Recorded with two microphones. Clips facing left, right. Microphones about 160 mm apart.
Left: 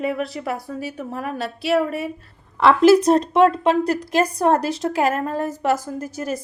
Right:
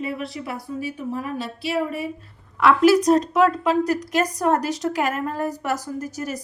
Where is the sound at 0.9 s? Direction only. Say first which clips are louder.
Right 1 dB; 60° left (ahead or behind).